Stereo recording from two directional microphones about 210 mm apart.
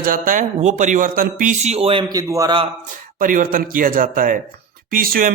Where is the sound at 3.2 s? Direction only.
40° right (ahead or behind).